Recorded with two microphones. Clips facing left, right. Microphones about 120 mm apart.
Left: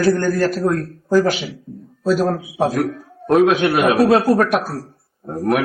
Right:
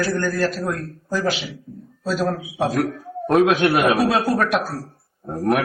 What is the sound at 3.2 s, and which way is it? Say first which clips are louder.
Speech: left 2 dB; centre (ahead or behind).